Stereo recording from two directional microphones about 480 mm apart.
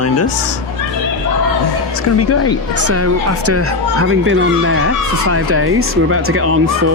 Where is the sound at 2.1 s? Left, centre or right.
Left.